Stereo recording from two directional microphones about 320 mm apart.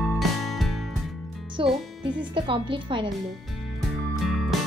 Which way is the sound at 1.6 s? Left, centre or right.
Centre.